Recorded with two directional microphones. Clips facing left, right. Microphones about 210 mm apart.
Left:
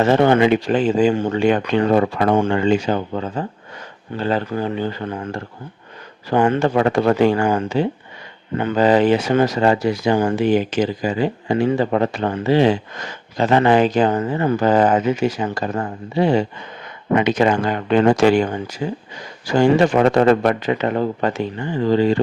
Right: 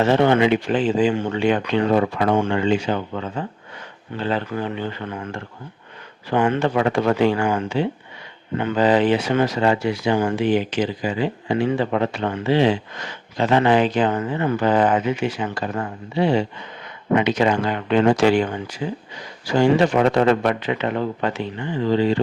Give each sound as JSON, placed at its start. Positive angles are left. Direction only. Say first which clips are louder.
{"t": 0.0, "sound": "speech", "louder": "left 2 dB", "side_deg": 45}